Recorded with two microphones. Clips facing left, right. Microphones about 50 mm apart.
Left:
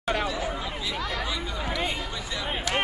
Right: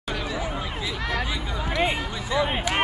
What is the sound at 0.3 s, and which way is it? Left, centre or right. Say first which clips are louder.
Chatter: right 1 dB; centre.